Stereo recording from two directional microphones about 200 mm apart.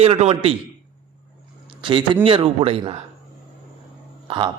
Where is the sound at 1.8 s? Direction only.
25° right (ahead or behind).